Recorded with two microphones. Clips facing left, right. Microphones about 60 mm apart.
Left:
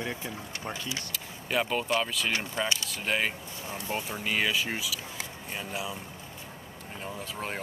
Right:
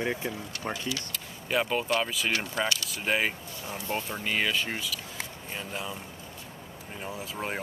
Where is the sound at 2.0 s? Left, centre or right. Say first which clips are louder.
Right 1 dB; centre.